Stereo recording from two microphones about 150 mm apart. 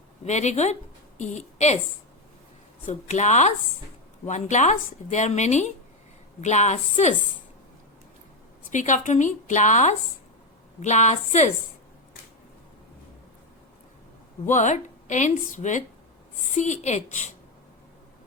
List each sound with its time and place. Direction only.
0.3 s speech: 50° left (ahead or behind)
2.8 s speech: 45° left (ahead or behind)
8.7 s a woman's voice: 55° left (ahead or behind)
14.4 s a woman's voice: 55° left (ahead or behind)